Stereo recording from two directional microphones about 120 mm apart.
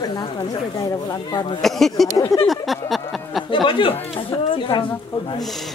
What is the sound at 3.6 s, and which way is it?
Speech, 45° left (ahead or behind).